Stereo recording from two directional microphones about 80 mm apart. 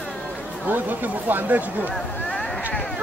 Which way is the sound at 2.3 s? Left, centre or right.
Centre.